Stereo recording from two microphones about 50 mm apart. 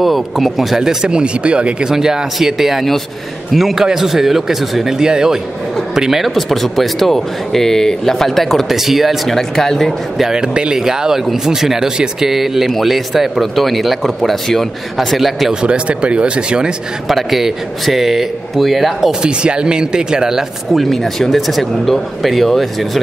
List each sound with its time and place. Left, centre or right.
0.0 s a man's voice: centre; by 1.9 s right
1.9 s a man's voice: centre
8.6 s a man's voice: centre
9.3 s speech: centre
10.2 s a man's voice: centre
15.6 s speech: right
17.1 s a man's voice: centre
19.2 s a man's voice: centre
20.7 s a man's voice: centre